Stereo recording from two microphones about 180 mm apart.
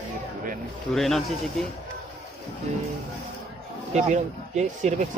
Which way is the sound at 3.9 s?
40° right (ahead or behind).